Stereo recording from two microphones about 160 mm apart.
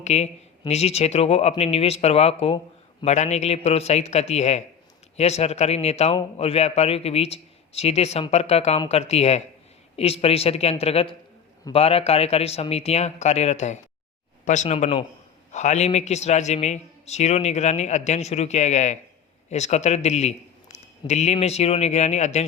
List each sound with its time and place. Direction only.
0.0 s a man's voice: 45° left (ahead or behind)